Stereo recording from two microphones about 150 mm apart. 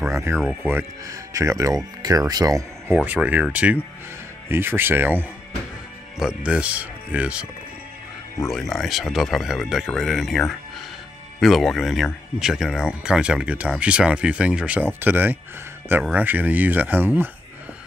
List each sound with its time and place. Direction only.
0.1 s speech: 20° right (ahead or behind)
3.1 s speech: 10° right (ahead or behind)
8.5 s speech: centre (ahead or behind)